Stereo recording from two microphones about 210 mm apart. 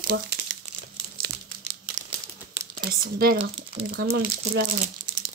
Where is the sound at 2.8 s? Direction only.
45° right (ahead or behind).